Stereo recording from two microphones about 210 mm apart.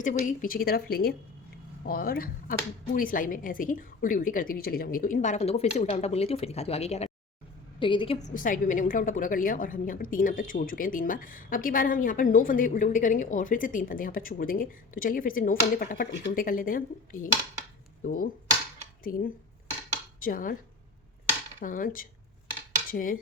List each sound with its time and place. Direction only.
0.0 s a woman's voice: 40° left (ahead or behind)
20.1 s speech: 40° left (ahead or behind)
21.6 s a woman's voice: 40° left (ahead or behind)
22.9 s cutlery: 40° left (ahead or behind)